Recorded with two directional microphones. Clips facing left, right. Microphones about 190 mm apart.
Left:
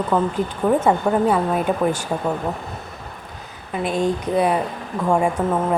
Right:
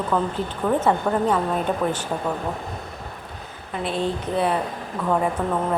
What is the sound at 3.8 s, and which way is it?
Speech, 15° left (ahead or behind).